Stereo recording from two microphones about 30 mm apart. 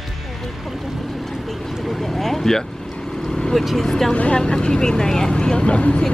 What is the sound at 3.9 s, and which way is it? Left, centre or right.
Vehicle, centre.